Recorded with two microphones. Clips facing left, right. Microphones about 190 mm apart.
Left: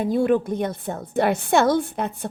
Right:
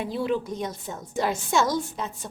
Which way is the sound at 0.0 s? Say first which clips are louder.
Left 7 dB; 50° left (ahead or behind).